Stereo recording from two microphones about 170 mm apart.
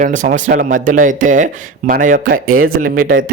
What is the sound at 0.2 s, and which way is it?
Speech, 50° right (ahead or behind).